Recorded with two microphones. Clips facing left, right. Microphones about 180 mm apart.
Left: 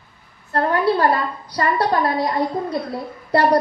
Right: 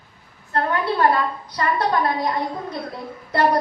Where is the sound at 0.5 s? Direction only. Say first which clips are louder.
Left 4 dB; 35° left (ahead or behind).